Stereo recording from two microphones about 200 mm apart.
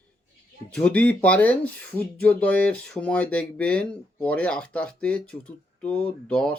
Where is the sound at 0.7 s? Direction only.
5° left (ahead or behind).